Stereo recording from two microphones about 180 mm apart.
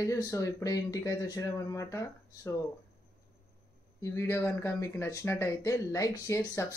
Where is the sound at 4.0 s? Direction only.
15° left (ahead or behind).